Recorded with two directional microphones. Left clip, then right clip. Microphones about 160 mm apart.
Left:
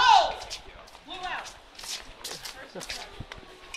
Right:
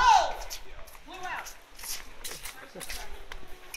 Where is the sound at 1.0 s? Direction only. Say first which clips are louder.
Left 2 dB; 10° left (ahead or behind).